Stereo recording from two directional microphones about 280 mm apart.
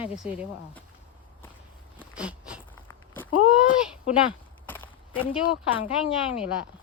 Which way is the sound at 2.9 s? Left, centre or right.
Centre.